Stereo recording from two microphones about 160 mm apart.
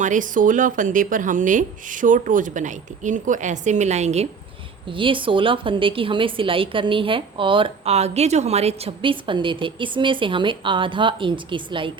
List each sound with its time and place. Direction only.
0.0 s a woman's voice: 55° right (ahead or behind)
4.9 s a woman's voice: 30° right (ahead or behind)